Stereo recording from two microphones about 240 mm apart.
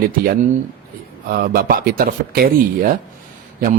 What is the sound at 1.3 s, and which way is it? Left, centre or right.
Speech, right.